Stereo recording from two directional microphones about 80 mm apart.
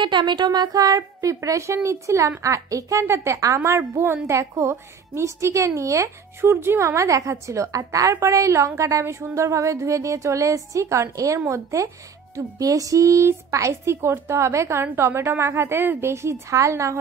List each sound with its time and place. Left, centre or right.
0.0 s speech: right